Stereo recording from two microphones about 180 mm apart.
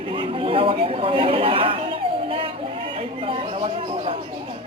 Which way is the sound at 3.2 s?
30° right (ahead or behind).